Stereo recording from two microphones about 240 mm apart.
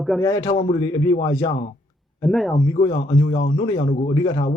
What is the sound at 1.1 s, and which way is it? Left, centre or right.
Speech, left.